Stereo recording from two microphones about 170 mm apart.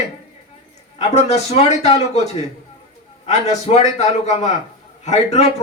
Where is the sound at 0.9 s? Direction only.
40° left (ahead or behind).